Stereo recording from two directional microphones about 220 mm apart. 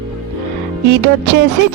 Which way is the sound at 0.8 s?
50° right (ahead or behind).